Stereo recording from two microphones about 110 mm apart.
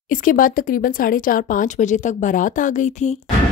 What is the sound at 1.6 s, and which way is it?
Speech, 90° left.